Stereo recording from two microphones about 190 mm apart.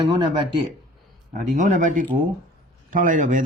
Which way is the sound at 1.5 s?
40° right (ahead or behind).